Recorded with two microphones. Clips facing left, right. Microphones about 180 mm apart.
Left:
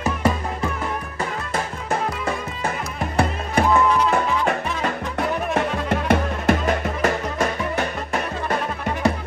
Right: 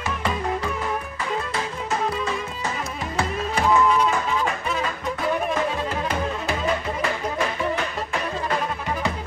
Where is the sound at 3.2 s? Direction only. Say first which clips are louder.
Left 4 dB; 60° left (ahead or behind); by 8.2 s 45° left (ahead or behind).